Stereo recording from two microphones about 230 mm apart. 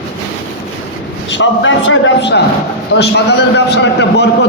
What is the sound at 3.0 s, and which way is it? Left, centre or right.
A man's voice, left.